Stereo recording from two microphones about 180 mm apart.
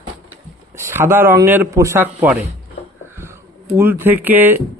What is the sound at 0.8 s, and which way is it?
Speech, 15° right (ahead or behind).